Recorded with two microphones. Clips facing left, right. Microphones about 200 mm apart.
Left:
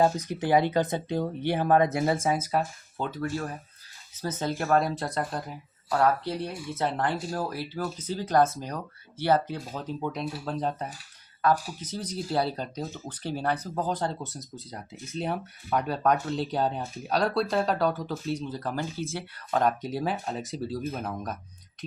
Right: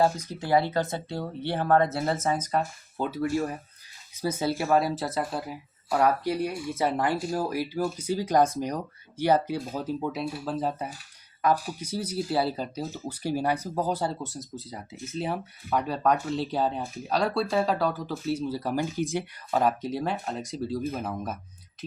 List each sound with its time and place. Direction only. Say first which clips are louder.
0.0 s speech: left 1 dB; 15° left (ahead or behind)
3.0 s speech: right 4 dB; 10° right (ahead or behind)
19.5 s speech: even; 5° right (ahead or behind)